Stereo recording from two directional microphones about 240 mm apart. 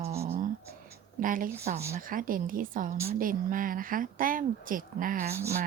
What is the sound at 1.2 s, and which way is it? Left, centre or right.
A woman's voice, right.